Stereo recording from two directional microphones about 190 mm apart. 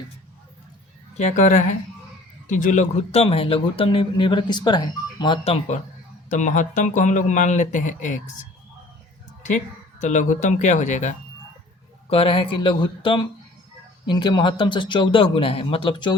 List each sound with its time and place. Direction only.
1.1 s speech: 40° left (ahead or behind)
6.3 s speech: 40° left (ahead or behind)
10.0 s speech: 40° left (ahead or behind); by 16.1 s 25° left (ahead or behind)